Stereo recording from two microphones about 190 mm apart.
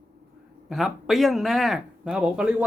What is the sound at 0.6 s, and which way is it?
Speech, centre (ahead or behind).